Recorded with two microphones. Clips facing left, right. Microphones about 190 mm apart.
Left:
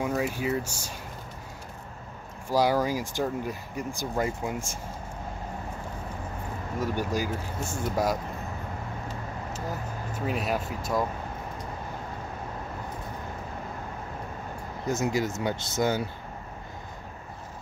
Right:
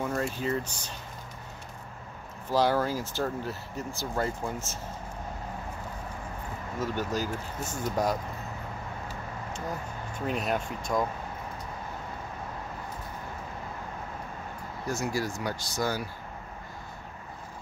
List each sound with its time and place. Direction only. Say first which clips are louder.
0.0 s speech: left 2 dB; 10° left (ahead or behind)
2.5 s speech: left 1 dB; 10° left (ahead or behind)
6.8 s speech: left 2 dB; 10° left (ahead or behind)
10.1 s speech: left 1 dB; 5° left (ahead or behind)
14.9 s speech: left 4 dB; 20° left (ahead or behind)